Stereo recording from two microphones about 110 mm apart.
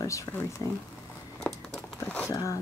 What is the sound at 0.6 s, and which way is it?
Speech, 40° left (ahead or behind).